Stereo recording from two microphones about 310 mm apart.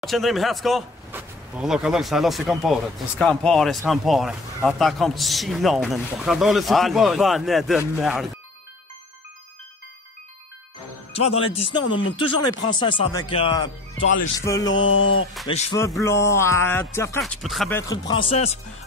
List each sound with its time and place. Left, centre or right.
0.0 s speech: centre
11.1 s speech: centre
14.7 s mantra: left
15.4 s speech: centre